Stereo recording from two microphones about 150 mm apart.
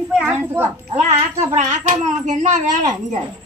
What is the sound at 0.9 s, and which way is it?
Speech, 45° right (ahead or behind).